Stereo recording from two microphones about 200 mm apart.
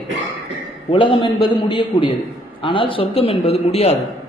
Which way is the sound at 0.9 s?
25° left (ahead or behind).